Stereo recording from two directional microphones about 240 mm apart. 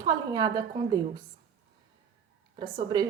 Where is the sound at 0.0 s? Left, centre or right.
Centre.